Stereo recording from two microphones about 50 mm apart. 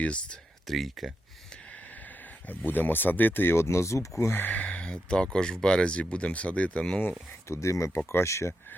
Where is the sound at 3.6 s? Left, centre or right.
Left.